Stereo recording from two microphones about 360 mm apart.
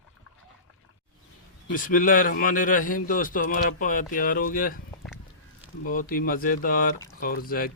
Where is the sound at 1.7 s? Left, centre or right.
Left.